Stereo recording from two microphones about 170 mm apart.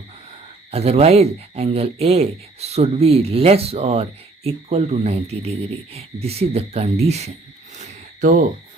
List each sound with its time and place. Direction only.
0.7 s speech: 35° right (ahead or behind)